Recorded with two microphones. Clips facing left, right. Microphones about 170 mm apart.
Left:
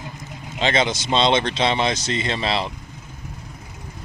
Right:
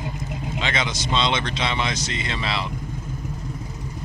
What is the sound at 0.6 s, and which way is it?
Speech, 30° left (ahead or behind).